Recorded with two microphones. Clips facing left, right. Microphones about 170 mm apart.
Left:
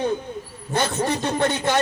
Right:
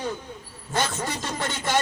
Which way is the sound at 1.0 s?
60° left (ahead or behind).